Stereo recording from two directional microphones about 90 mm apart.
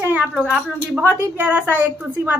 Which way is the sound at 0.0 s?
15° right (ahead or behind).